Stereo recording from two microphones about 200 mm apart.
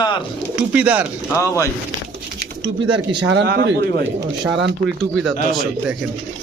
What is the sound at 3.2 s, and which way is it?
Speech, 60° right (ahead or behind).